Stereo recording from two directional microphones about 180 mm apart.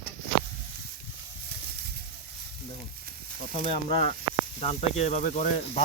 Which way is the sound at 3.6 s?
30° left (ahead or behind).